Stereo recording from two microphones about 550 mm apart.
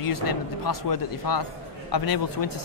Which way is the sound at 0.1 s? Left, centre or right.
Left.